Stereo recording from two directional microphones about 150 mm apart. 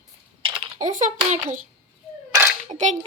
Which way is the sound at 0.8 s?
55° right (ahead or behind).